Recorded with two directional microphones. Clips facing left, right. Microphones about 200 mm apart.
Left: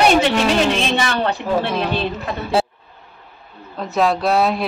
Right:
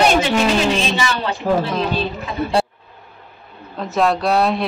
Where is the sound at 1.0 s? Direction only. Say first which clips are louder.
Left 2 dB; 60° left (ahead or behind).